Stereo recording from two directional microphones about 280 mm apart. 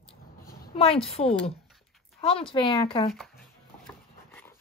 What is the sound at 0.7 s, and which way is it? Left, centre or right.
Speech, left.